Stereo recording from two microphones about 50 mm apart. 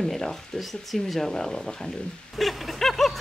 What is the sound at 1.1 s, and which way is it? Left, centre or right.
Speech, centre.